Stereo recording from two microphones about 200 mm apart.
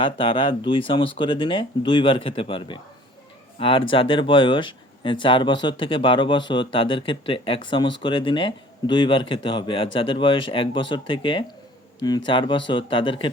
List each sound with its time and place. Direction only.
0.0 s speech: 25° left (ahead or behind)